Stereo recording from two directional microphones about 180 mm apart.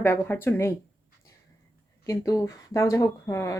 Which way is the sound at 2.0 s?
15° left (ahead or behind).